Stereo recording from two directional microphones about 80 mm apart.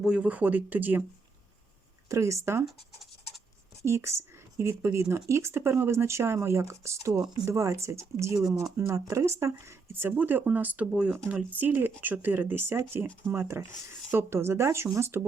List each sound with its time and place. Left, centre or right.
0.2 s speech: centre
2.0 s speech: right
2.6 s scratch: centre
3.8 s speech: right